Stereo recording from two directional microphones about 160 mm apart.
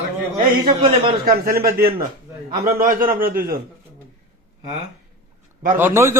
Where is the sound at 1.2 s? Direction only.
65° right (ahead or behind).